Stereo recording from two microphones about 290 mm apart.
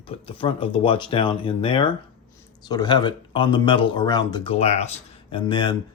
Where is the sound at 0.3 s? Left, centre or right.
Centre.